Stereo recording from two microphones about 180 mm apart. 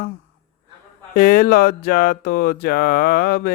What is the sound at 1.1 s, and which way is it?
Mantra, 50° left (ahead or behind).